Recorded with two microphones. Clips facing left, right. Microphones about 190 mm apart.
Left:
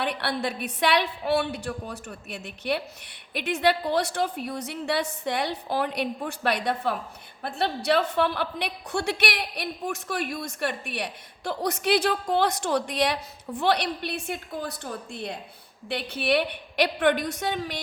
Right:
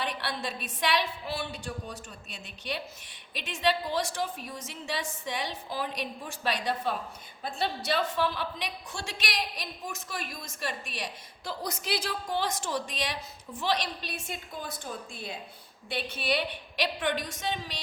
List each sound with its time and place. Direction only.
0.0 s a woman's voice: 60° left (ahead or behind)